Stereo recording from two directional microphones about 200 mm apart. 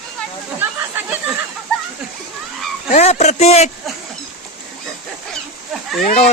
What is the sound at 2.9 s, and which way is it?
Speech, 35° left (ahead or behind).